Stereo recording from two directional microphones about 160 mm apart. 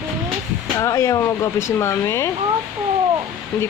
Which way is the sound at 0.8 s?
20° left (ahead or behind).